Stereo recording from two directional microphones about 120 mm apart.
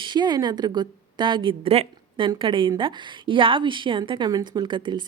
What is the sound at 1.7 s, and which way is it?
Speech, 60° right (ahead or behind).